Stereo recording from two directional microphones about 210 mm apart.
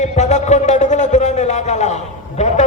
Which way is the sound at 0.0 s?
35° left (ahead or behind).